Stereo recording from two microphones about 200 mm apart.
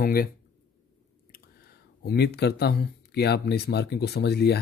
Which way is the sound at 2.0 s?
55° left (ahead or behind).